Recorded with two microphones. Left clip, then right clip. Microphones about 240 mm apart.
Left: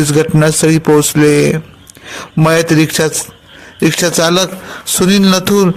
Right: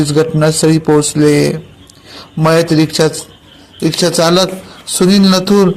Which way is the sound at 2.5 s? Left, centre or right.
Left.